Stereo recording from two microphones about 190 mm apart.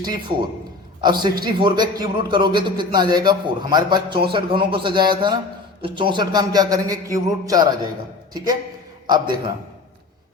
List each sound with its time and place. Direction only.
0.0 s a man's voice: 25° right (ahead or behind)